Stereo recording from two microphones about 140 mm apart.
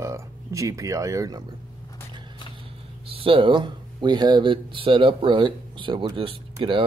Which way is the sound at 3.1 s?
40° right (ahead or behind).